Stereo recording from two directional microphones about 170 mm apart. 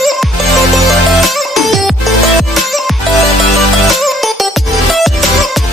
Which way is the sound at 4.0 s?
Centre (ahead or behind).